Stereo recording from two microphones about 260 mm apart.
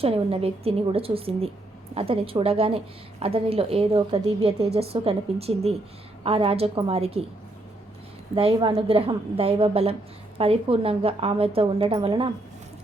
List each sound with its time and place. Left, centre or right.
0.0 s a woman's voice: right
8.4 s a woman's voice: centre